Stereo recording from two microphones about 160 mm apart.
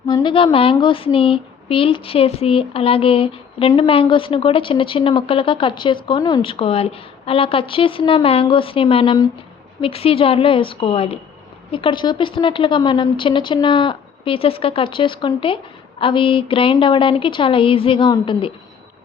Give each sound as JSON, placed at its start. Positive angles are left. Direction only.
{"t": 0.1, "sound": "speech", "side_deg": 30}